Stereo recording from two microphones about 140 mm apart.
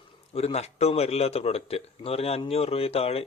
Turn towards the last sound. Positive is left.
turn(degrees=45)  # may be behind; listen again after turning